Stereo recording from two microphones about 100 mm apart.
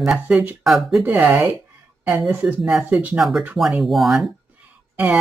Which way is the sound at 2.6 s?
Centre (ahead or behind).